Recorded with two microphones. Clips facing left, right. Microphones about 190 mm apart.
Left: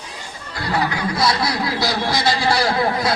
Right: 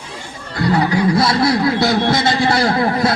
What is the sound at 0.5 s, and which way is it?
Speech, 25° right (ahead or behind).